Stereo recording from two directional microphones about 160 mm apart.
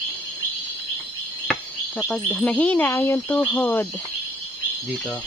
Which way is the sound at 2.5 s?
10° left (ahead or behind).